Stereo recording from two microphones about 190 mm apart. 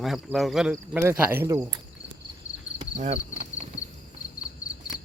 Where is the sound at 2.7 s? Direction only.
35° right (ahead or behind).